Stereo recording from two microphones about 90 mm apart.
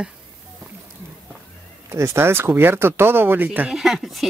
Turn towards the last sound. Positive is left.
turn(degrees=0)  # may be behind; listen again after turning